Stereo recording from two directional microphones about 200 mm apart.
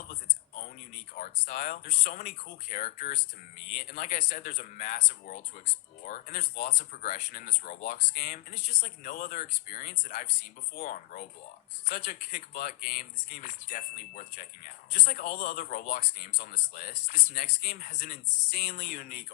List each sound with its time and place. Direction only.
1.1 s speech: 45° left (ahead or behind)